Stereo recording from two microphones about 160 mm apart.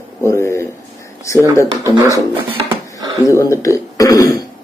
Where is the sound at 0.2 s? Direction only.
15° left (ahead or behind).